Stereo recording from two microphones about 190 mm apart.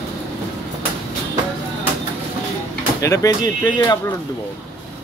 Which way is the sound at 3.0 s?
15° left (ahead or behind).